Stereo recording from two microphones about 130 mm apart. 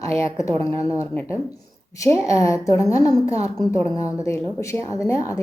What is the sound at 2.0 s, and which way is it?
A woman's voice, 25° left (ahead or behind).